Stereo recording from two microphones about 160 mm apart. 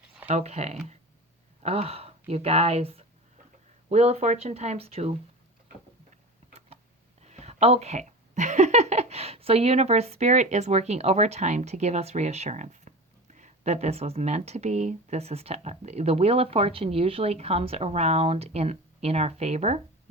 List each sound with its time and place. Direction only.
0.3 s speech: 40° right (ahead or behind)
7.2 s speech: 45° right (ahead or behind)